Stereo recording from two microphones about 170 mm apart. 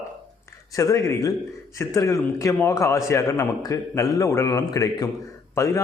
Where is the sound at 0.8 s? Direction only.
20° left (ahead or behind).